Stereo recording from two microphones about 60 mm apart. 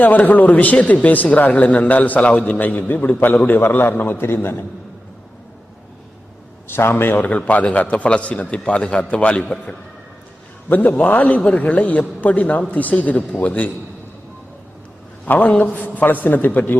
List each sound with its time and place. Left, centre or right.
0.0 s a man's voice: left
6.7 s a man's voice: left
7.2 s a man's voice: left
10.7 s a man's voice: left
15.3 s a man's voice: left